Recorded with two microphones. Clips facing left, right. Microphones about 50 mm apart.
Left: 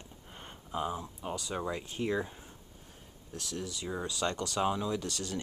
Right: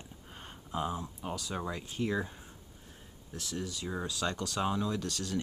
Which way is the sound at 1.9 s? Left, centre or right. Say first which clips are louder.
Even; centre.